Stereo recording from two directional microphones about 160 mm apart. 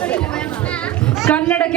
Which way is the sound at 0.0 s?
5° left (ahead or behind).